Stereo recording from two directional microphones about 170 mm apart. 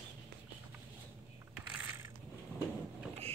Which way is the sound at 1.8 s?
15° right (ahead or behind).